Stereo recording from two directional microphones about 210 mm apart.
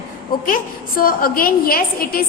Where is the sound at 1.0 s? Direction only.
45° left (ahead or behind).